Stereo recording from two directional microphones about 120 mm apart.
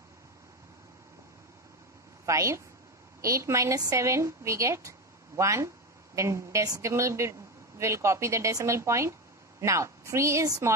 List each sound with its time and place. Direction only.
2.2 s a woman's voice: 25° right (ahead or behind)